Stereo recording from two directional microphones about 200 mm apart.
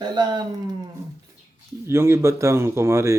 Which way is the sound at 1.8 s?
15° right (ahead or behind).